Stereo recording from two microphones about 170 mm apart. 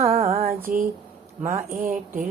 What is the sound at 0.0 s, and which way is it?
Female singing, 35° right (ahead or behind).